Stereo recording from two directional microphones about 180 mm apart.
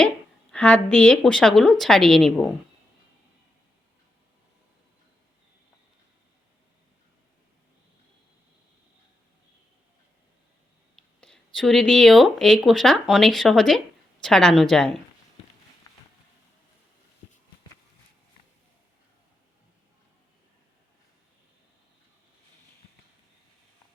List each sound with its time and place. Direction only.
0.5 s a woman's voice: 5° left (ahead or behind)
10.9 s speech: 5° left (ahead or behind)
15.9 s a sound: 20° left (ahead or behind)